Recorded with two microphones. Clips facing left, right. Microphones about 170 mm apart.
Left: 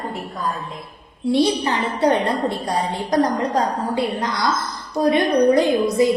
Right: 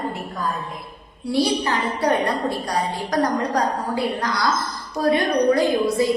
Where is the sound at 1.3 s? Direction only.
20° left (ahead or behind).